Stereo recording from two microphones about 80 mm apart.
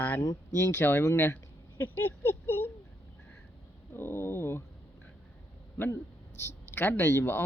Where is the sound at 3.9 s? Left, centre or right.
Left.